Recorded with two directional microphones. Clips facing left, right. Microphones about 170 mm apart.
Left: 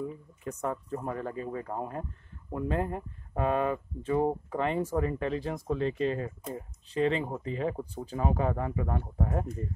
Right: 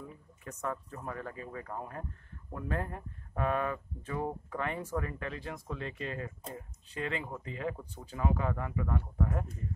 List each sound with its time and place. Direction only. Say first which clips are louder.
0.4 s speech: left 4 dB; 20° left (ahead or behind)